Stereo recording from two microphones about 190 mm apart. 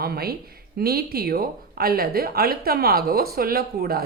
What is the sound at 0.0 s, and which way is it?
Speech, 55° right (ahead or behind).